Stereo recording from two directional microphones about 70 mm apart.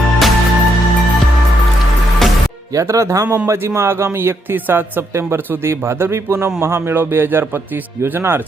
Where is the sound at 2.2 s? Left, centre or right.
Centre.